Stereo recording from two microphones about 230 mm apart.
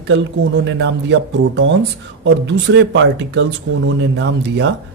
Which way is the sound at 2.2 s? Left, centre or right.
Right.